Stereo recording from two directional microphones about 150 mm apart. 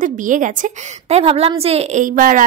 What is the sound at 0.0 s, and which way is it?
A woman's voice, 60° right (ahead or behind).